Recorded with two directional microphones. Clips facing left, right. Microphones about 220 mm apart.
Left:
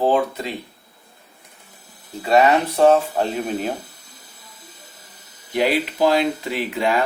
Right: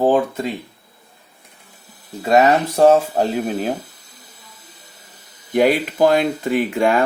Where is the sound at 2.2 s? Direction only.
45° right (ahead or behind).